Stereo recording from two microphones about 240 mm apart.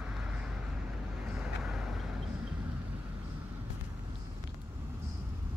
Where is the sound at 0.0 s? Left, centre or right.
Centre.